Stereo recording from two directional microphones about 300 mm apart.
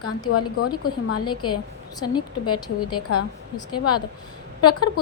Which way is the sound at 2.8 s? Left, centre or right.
Left.